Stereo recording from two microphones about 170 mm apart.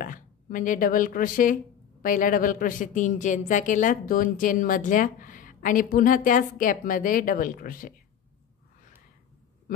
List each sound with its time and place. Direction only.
0.0 s speech: 50° left (ahead or behind)